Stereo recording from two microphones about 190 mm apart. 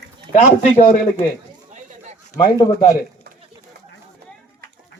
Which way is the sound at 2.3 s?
20° left (ahead or behind).